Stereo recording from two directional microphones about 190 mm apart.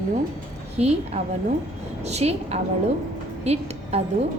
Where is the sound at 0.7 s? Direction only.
35° right (ahead or behind).